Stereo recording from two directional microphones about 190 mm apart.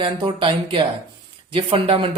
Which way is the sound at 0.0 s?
25° right (ahead or behind).